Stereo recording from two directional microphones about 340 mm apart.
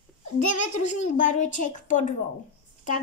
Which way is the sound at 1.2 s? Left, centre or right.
Left.